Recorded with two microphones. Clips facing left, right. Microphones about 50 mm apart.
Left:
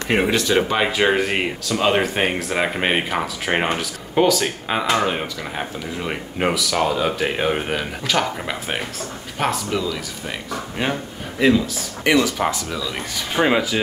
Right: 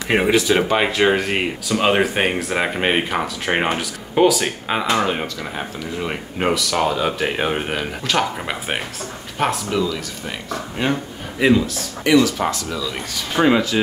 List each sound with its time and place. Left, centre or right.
0.1 s speech: centre
1.7 s speech: centre
9.4 s speech: centre
11.3 s a man's voice: centre
12.0 s speech: left
12.4 s speech: centre